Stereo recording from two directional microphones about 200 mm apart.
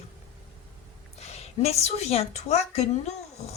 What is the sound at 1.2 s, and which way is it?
A woman's voice, 30° left (ahead or behind).